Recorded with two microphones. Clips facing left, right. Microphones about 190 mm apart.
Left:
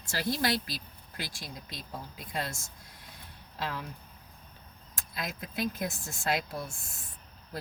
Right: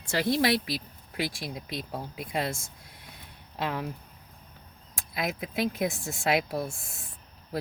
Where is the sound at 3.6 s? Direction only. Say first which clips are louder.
Right 5 dB; 55° right (ahead or behind).